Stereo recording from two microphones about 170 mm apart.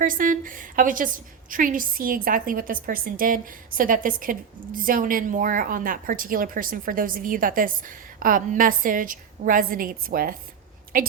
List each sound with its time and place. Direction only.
0.0 s a woman's voice: 50° right (ahead or behind)